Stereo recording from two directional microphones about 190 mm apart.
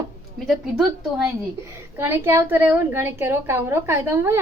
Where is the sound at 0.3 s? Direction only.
Centre (ahead or behind).